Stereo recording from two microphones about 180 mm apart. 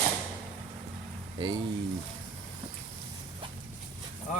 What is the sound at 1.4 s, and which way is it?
Speech, 30° right (ahead or behind).